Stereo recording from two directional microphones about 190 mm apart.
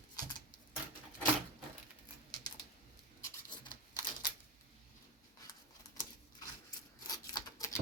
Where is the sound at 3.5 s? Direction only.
25° left (ahead or behind).